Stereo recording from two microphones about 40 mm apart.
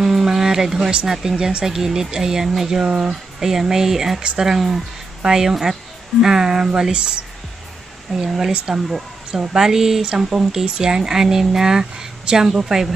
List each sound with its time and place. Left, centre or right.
0.0 s a sound: centre
1.3 s speech: centre
3.3 s speech: centre
8.2 s speech: centre